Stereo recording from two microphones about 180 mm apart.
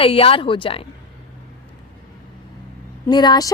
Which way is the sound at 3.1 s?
25° left (ahead or behind).